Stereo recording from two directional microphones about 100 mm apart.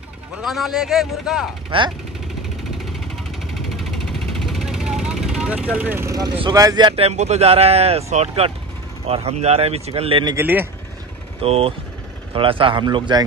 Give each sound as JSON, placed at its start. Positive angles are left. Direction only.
{"t": 0.4, "sound": "speech", "side_deg": 0}
{"t": 1.7, "sound": "a man's voice", "side_deg": -60}
{"t": 3.7, "sound": "vehicle", "side_deg": 0}
{"t": 6.0, "sound": "speech", "side_deg": -40}
{"t": 6.9, "sound": "speech", "side_deg": -85}
{"t": 10.3, "sound": "speech", "side_deg": -20}
{"t": 11.4, "sound": "speech", "side_deg": -90}
{"t": 12.4, "sound": "a man's voice", "side_deg": -60}